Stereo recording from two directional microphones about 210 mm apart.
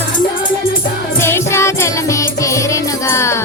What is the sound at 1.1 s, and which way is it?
Music, 10° left (ahead or behind).